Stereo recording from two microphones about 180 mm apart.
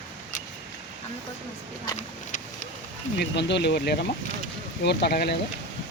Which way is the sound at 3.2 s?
70° left (ahead or behind).